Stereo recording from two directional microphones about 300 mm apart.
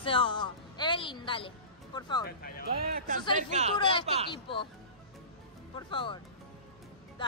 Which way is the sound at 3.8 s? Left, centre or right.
Centre.